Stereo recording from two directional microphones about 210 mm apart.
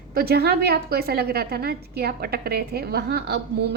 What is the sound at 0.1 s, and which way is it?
A woman's voice, 45° right (ahead or behind).